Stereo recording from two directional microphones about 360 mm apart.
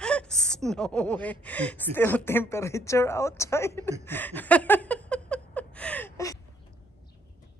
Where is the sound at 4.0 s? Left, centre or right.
Centre.